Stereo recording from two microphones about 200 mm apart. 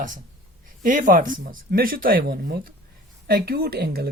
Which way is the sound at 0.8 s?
40° right (ahead or behind).